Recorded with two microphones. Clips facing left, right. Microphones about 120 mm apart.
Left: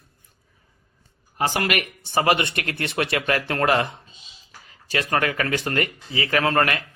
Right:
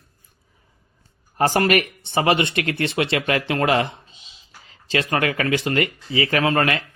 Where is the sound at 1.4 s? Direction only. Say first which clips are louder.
Right 5 dB; 45° right (ahead or behind).